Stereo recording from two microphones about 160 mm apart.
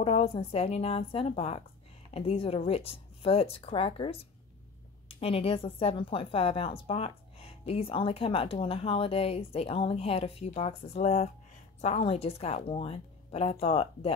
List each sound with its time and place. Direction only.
0.0 s a woman's voice: 40° left (ahead or behind)